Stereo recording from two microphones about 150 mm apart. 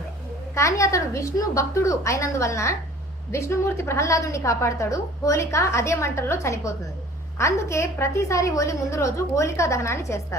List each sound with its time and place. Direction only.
0.5 s a woman's voice: 20° left (ahead or behind)